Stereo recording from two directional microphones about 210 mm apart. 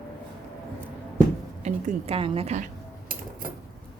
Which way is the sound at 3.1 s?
45° right (ahead or behind).